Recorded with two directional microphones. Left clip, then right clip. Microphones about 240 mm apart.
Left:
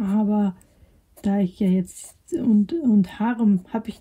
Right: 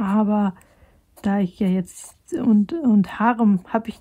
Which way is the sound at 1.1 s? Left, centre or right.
Centre.